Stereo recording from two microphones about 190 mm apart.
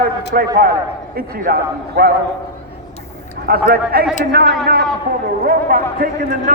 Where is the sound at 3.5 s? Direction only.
55° right (ahead or behind).